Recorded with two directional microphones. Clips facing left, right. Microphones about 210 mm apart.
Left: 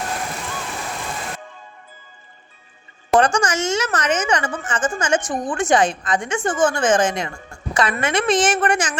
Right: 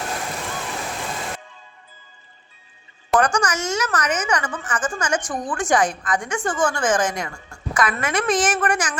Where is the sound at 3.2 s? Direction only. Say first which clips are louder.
Left 3 dB; 25° left (ahead or behind).